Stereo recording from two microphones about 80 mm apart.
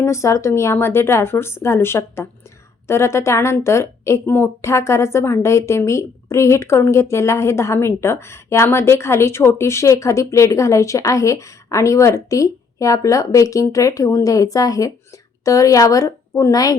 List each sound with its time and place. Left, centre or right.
0.0 s a woman's voice: left